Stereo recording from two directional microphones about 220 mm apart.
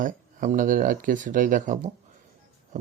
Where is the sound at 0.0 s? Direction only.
35° right (ahead or behind).